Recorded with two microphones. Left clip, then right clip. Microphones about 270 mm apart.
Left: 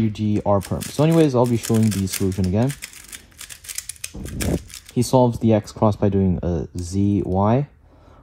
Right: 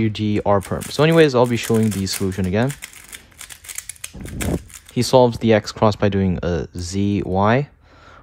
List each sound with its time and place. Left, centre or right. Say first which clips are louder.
0.2 s speech: right 2 dB; left
4.5 s speech: left 1 dB; left